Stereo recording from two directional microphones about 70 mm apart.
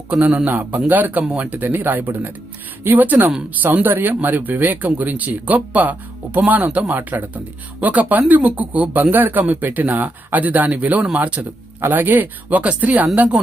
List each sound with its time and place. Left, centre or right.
0.1 s speech: centre